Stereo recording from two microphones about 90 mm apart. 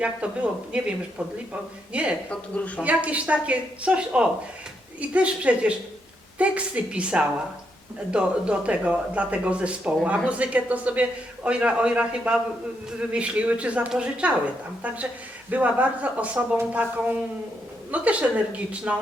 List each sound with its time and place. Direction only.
0.0 s speech: 15° right (ahead or behind)
2.3 s a woman's voice: 15° left (ahead or behind)
2.8 s speech: 15° right (ahead or behind)
15.4 s speech: 15° right (ahead or behind)